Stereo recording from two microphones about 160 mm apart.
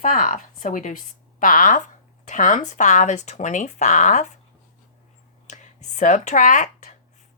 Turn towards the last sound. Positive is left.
turn(degrees=50)  # may be behind; listen again after turning